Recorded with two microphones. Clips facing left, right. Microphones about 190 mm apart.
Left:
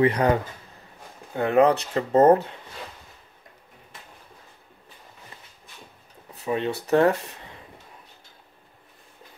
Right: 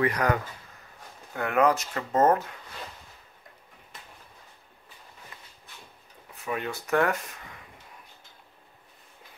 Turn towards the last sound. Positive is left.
turn(degrees=30)  # may be behind; listen again after turning